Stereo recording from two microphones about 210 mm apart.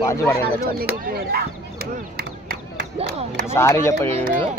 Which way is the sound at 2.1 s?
45° right (ahead or behind).